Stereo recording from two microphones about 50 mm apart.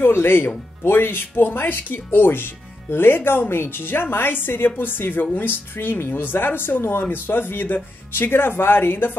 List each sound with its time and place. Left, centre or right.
0.0 s speech: left